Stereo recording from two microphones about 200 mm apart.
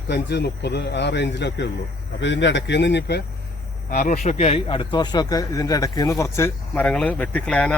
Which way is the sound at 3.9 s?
45° left (ahead or behind).